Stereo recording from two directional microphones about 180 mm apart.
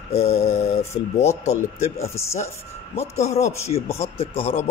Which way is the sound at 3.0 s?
35° left (ahead or behind).